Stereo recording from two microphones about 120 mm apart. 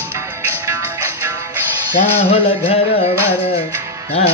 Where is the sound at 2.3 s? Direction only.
55° left (ahead or behind).